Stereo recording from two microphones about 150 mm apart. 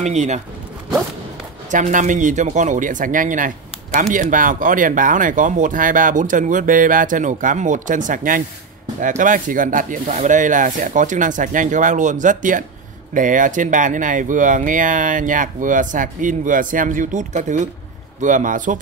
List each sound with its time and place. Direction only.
0.0 s speech: 50° right (ahead or behind)
1.7 s speech: 55° right (ahead or behind)